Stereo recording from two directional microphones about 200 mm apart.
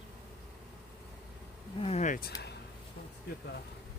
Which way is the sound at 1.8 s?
35° left (ahead or behind).